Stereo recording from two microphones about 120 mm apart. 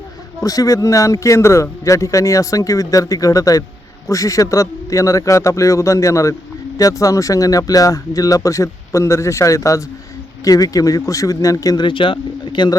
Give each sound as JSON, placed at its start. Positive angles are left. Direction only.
{"t": 0.4, "sound": "speech", "side_deg": 30}
{"t": 11.9, "sound": "speech", "side_deg": 45}